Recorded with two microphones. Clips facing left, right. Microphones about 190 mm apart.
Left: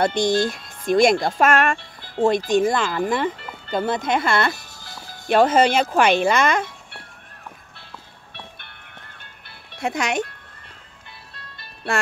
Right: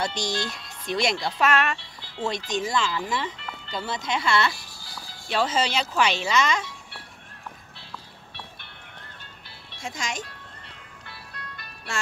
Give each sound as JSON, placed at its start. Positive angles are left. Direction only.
{"t": 0.0, "sound": "speech", "side_deg": 55}
{"t": 9.7, "sound": "speech", "side_deg": 65}
{"t": 11.1, "sound": "music", "side_deg": 25}
{"t": 11.9, "sound": "speech", "side_deg": 55}